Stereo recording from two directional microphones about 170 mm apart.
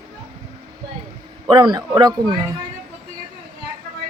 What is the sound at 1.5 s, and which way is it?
Speech, 25° right (ahead or behind).